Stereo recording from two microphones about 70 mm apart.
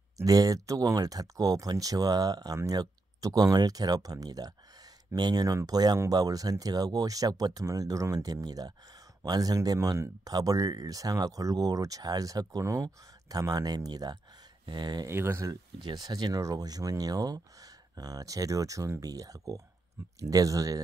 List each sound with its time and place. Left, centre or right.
0.2 s speech: right
5.1 s speech: right
14.7 s speech: right
15.0 s speech: right
15.8 s speech: right